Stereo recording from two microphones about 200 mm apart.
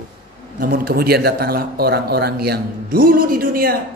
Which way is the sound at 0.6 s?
50° right (ahead or behind).